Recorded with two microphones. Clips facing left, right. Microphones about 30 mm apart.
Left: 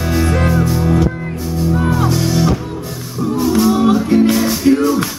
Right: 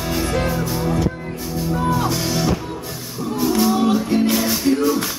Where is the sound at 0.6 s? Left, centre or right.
Centre.